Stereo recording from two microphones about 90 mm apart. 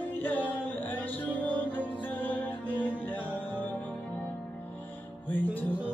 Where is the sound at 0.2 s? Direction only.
20° left (ahead or behind).